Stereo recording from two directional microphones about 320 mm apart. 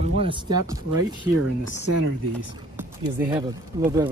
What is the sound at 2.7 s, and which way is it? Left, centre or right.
Speech, centre.